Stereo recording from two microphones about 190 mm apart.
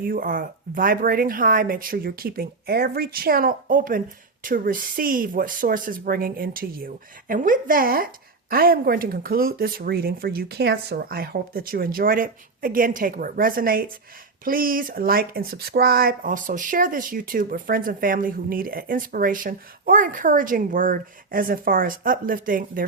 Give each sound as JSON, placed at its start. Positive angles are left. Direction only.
{"t": 0.0, "sound": "speech", "side_deg": -50}